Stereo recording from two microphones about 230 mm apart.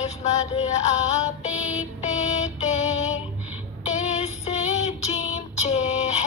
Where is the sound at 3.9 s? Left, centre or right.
Left.